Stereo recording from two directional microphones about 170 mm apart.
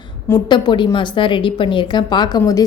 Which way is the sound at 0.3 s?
25° left (ahead or behind).